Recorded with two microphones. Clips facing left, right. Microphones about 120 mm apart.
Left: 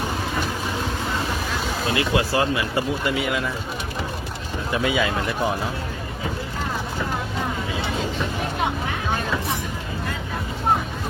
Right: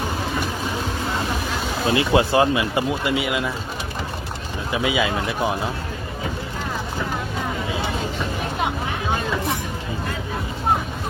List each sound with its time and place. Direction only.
1.9 s speech: 25° right (ahead or behind)
4.7 s speech: 5° right (ahead or behind)